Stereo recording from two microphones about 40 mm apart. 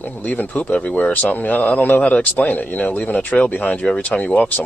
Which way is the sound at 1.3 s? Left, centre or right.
Left.